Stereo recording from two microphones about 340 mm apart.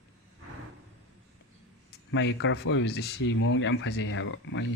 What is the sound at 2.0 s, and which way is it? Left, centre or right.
Speech, left.